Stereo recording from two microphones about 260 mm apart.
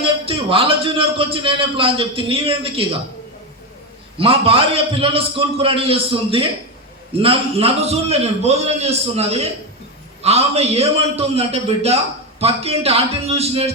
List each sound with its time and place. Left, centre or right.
0.3 s a man's voice: right
4.2 s a man's voice: right